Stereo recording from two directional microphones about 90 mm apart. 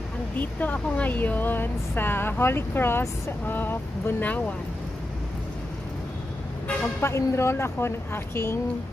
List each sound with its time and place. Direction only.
0.4 s speech: 20° left (ahead or behind)
7.0 s speech: 30° left (ahead or behind)